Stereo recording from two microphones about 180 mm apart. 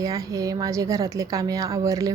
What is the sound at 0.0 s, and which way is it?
Speech, 20° right (ahead or behind).